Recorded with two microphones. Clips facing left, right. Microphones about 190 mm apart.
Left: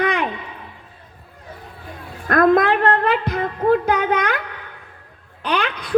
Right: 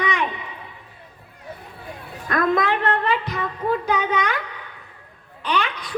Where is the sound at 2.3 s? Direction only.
55° left (ahead or behind).